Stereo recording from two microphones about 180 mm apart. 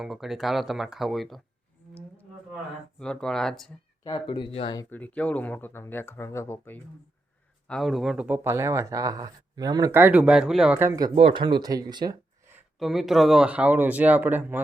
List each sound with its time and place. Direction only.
0.0 s speech: centre (ahead or behind)
3.0 s speech: 5° left (ahead or behind)
4.0 s speech: 25° left (ahead or behind)
4.9 s speech: 10° left (ahead or behind)
7.7 s speech: centre (ahead or behind); by 11.1 s 15° right (ahead or behind)
11.1 s speech: 30° right (ahead or behind)
12.8 s speech: centre (ahead or behind)